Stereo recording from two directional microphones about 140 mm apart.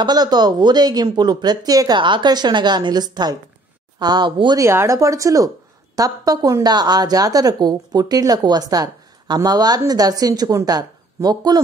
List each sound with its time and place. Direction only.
0.0 s a woman's voice: 30° right (ahead or behind)
4.6 s a woman's voice: 20° right (ahead or behind)